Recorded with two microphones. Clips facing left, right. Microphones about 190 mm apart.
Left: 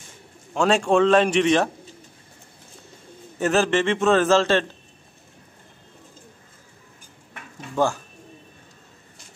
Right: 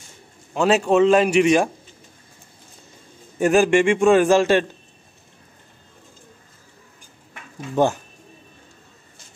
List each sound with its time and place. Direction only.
0.6 s a man's voice: 5° right (ahead or behind)
3.3 s a man's voice: 15° right (ahead or behind)
7.7 s speech: 20° right (ahead or behind)